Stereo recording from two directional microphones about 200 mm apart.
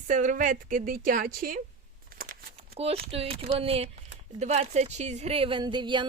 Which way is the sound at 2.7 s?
30° right (ahead or behind).